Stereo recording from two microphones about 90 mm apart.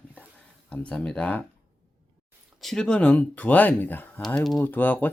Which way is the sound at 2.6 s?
5° left (ahead or behind).